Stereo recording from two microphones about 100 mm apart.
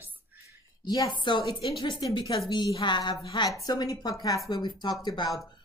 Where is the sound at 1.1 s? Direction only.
50° left (ahead or behind).